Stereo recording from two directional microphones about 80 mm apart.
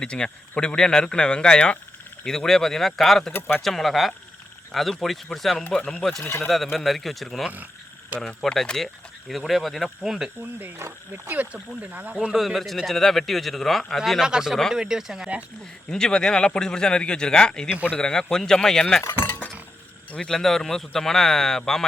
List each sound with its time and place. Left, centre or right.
0.0 s speech: centre
3.3 s speech: left
3.6 s speech: centre
6.2 s speech: left
6.5 s speech: centre
7.4 s speech: centre
8.2 s speech: centre
10.4 s speech: right
12.3 s speech: centre
15.9 s speech: centre
19.0 s speech: left
20.1 s speech: centre